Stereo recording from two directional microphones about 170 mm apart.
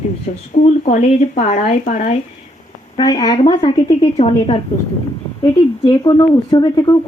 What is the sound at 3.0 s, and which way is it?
Speech, 25° left (ahead or behind).